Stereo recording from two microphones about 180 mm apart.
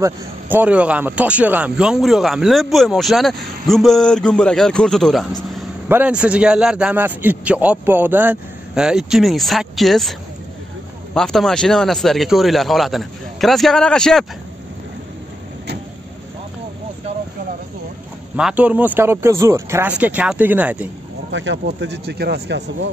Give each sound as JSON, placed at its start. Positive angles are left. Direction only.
{"t": 0.0, "sound": "a man's voice", "side_deg": -10}
{"t": 5.9, "sound": "a man's voice", "side_deg": -10}
{"t": 11.1, "sound": "a man's voice", "side_deg": 5}
{"t": 18.3, "sound": "a man's voice", "side_deg": -5}
{"t": 21.3, "sound": "speech", "side_deg": -90}